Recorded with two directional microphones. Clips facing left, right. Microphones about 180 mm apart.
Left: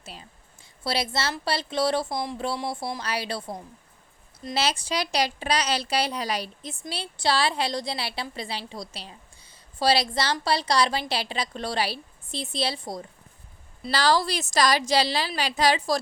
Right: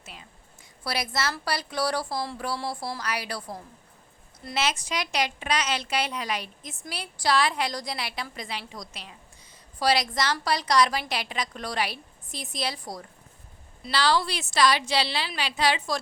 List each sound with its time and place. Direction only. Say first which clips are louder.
0.0 s a woman's voice: left 3 dB; 30° left (ahead or behind)
13.9 s a woman's voice: left 2 dB; 40° left (ahead or behind)